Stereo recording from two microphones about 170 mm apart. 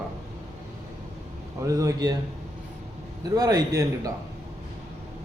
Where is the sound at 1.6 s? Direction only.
20° right (ahead or behind).